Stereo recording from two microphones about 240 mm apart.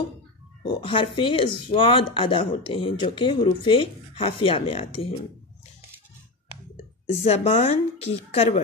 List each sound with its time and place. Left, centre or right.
0.7 s speech: left
7.1 s speech: left